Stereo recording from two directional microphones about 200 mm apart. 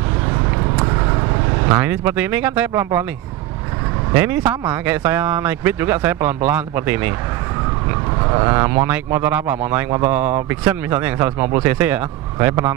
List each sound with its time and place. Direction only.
1.7 s speech: 10° right (ahead or behind)
4.1 s speech: 10° right (ahead or behind)
8.3 s speech: 20° right (ahead or behind)